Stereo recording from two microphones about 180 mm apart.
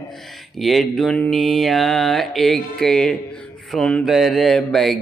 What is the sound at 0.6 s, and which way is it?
Mantra, centre (ahead or behind).